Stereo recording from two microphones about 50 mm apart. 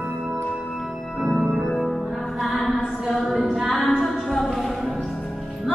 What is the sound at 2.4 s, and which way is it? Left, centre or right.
Music, centre.